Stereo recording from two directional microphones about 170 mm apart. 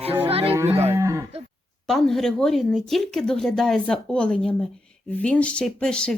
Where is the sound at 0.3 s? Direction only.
35° right (ahead or behind).